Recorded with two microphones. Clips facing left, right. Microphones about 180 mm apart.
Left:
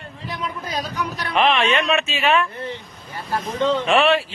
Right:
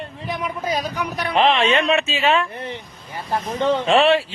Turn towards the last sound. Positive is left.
turn(degrees=-30)  # may be behind; listen again after turning